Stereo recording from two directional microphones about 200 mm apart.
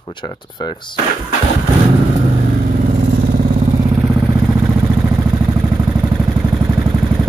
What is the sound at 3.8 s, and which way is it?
Vehicle, 15° right (ahead or behind).